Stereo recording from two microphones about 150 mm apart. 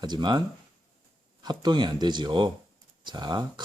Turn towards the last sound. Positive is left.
turn(degrees=-30)  # may be behind; listen again after turning